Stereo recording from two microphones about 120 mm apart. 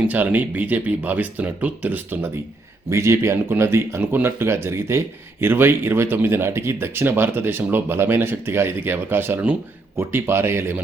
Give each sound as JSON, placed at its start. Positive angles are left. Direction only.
{"t": 0.1, "sound": "speech", "side_deg": -15}